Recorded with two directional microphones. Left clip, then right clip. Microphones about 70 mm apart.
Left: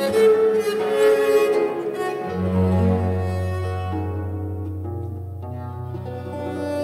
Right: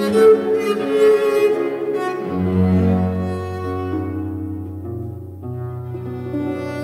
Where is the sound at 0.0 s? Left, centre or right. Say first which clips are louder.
Right 3 dB; right.